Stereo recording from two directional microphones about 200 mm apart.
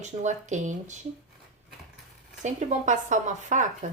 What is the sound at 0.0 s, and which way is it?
Speech, 35° right (ahead or behind).